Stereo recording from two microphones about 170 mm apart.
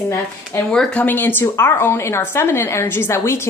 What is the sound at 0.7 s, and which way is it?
Speech, 5° left (ahead or behind).